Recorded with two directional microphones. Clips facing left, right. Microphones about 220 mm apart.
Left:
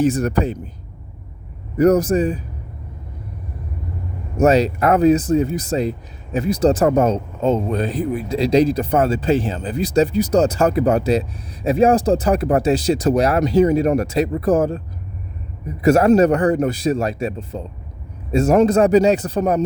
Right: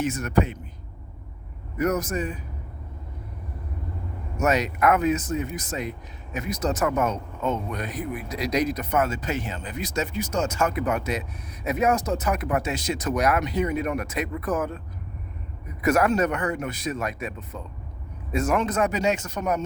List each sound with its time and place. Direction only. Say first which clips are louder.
0.0 s speech: left 6 dB; 35° left (ahead or behind)
1.8 s speech: left 11 dB; 30° left (ahead or behind)
4.4 s speech: left 8 dB; 30° left (ahead or behind)